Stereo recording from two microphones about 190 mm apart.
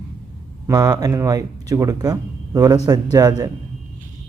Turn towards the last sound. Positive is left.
turn(degrees=-20)  # may be behind; listen again after turning